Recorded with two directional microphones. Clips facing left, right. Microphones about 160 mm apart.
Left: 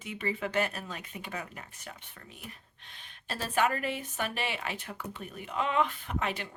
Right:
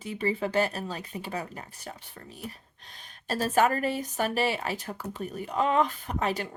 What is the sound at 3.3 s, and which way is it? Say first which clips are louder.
A woman's voice: right 5 dB; 40° right (ahead or behind).